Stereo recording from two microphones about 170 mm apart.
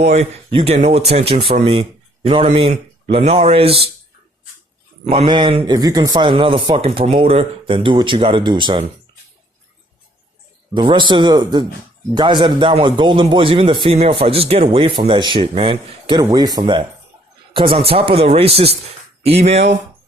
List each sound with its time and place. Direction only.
0.0 s a man's voice: 40° right (ahead or behind)
5.0 s speech: 30° right (ahead or behind)
10.8 s a man's voice: 30° right (ahead or behind)